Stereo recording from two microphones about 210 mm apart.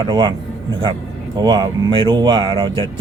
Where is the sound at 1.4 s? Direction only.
20° right (ahead or behind).